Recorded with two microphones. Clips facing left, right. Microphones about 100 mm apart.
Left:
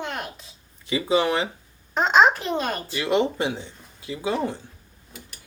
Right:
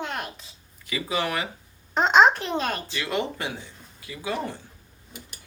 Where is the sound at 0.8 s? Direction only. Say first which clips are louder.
Left 6 dB; 25° left (ahead or behind).